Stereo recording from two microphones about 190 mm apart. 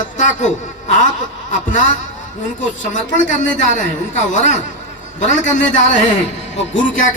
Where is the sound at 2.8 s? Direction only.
40° left (ahead or behind).